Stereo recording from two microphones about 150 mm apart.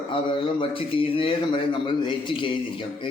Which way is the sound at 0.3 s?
35° left (ahead or behind).